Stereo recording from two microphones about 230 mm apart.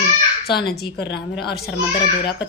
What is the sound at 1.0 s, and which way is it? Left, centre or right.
Speech, left.